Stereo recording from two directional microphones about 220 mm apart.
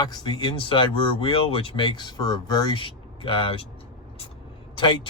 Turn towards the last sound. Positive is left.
turn(degrees=20)  # may be behind; listen again after turning